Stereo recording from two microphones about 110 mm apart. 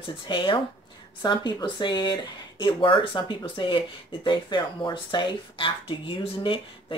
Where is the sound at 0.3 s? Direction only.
50° left (ahead or behind).